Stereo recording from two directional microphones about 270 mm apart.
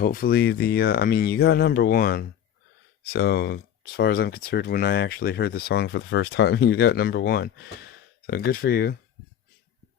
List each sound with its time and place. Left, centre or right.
0.0 s speech: left